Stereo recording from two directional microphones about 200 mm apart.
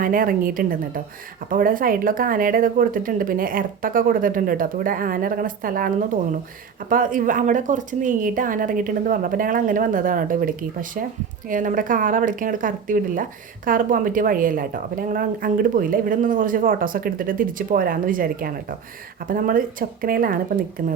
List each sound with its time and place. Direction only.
0.0 s a woman's voice: 45° right (ahead or behind)